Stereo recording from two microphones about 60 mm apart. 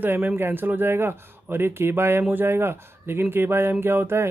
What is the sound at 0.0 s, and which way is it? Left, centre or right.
Speech, right.